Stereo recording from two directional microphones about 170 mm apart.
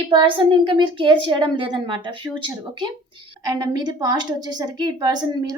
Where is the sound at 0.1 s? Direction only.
30° right (ahead or behind).